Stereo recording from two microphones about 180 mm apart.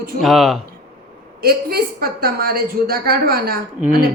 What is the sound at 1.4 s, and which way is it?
Speech, 60° right (ahead or behind).